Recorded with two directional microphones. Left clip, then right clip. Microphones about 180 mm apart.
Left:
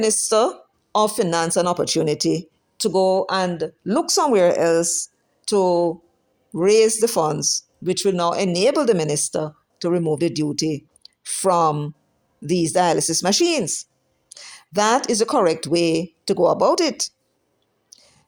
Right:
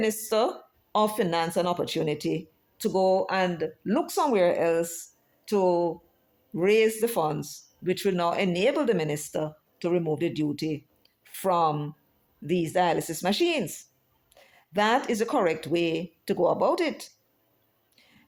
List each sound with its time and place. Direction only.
0.0 s speech: 40° left (ahead or behind)
2.8 s speech: 30° left (ahead or behind); by 5.0 s 45° left (ahead or behind)
5.5 s speech: 35° left (ahead or behind)
7.9 s speech: 30° left (ahead or behind)